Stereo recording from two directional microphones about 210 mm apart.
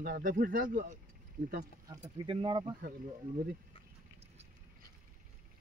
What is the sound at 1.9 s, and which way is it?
Speech, 20° right (ahead or behind).